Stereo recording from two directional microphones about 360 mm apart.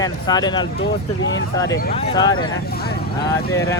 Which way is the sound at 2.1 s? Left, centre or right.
Centre.